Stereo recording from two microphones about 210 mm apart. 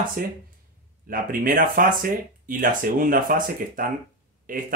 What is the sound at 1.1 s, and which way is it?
Speech, 40° right (ahead or behind).